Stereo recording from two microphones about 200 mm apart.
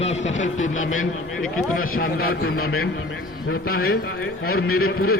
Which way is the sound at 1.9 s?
50° left (ahead or behind).